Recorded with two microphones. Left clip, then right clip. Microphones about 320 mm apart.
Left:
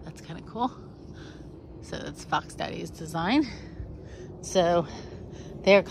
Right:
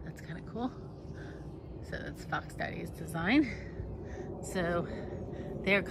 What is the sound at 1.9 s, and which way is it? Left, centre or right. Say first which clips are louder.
Speech: left 8 dB; centre.